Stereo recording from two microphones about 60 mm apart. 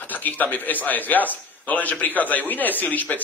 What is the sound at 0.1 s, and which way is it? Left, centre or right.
A man's voice, left.